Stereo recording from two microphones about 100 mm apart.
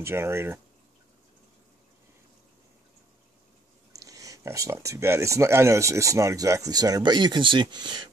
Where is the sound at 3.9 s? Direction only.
35° right (ahead or behind).